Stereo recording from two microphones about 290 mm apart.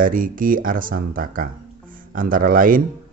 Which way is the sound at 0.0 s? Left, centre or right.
Right.